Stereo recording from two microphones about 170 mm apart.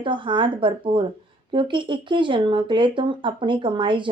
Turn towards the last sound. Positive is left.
turn(degrees=-30)  # may be behind; listen again after turning